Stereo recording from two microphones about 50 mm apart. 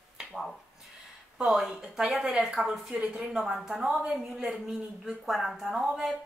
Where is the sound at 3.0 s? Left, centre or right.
Right.